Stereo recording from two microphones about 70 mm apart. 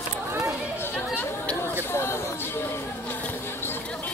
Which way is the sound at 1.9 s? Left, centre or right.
Left.